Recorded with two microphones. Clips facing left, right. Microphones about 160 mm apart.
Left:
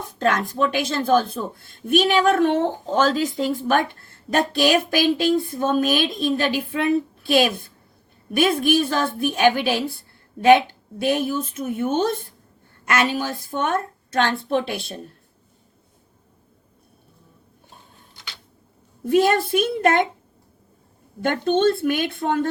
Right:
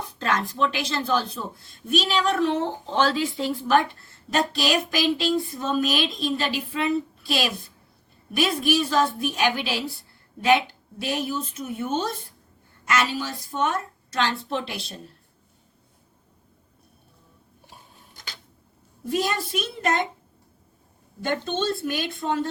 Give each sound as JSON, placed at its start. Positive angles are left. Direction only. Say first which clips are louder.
{"t": 0.0, "sound": "a woman's voice", "louder": "left 5 dB", "side_deg": 50}
{"t": 18.1, "sound": "a sound", "louder": "even", "side_deg": -45}
{"t": 19.0, "sound": "a woman's voice", "louder": "left 8 dB", "side_deg": 55}
{"t": 21.2, "sound": "a woman's voice", "louder": "left 7 dB", "side_deg": 55}